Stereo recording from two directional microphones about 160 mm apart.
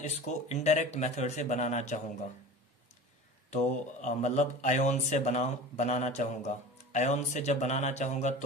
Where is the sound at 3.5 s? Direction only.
50° left (ahead or behind).